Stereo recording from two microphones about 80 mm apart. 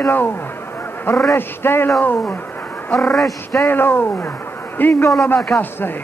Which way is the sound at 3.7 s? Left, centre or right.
Left.